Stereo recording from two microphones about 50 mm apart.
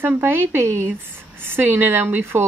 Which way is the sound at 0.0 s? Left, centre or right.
Right.